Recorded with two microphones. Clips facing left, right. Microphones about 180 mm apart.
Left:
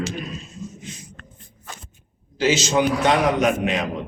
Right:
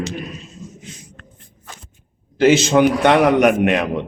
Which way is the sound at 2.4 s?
60° right (ahead or behind).